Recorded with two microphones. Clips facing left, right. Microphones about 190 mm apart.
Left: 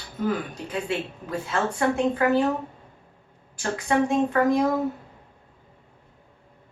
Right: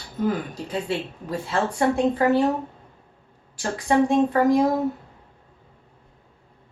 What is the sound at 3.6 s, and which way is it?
A woman's voice, 30° right (ahead or behind).